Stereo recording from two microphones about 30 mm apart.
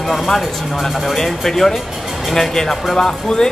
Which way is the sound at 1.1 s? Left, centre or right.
Centre.